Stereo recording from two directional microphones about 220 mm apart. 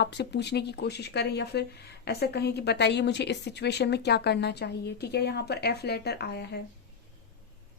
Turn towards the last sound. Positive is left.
turn(degrees=50)  # may be behind; listen again after turning